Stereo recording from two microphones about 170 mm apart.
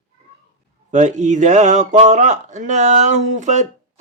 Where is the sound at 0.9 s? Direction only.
45° right (ahead or behind).